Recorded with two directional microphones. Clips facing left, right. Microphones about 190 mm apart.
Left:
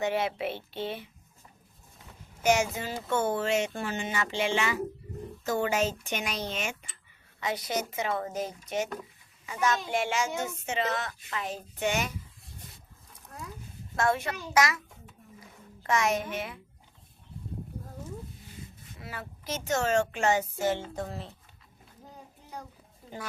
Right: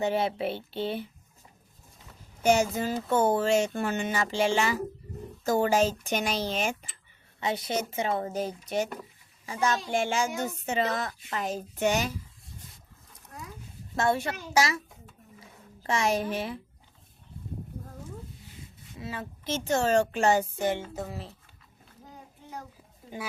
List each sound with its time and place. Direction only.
0.0 s speech: 30° right (ahead or behind)
2.4 s speech: 30° right (ahead or behind)
3.8 s speech: 50° right (ahead or behind)
13.9 s speech: 30° right (ahead or behind)
15.4 s a sound: 30° right (ahead or behind)
18.9 s speech: 25° right (ahead or behind)
20.6 s music: 15° right (ahead or behind)
20.9 s speech: 5° right (ahead or behind)